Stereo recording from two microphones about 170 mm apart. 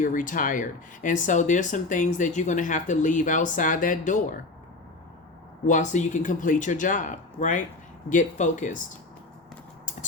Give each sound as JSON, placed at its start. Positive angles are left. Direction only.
{"t": 0.0, "sound": "speech", "side_deg": 50}
{"t": 5.6, "sound": "speech", "side_deg": 45}